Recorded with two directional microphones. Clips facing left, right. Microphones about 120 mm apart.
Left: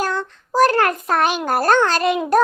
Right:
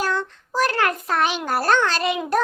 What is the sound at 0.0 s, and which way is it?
A child's voice, 45° left (ahead or behind).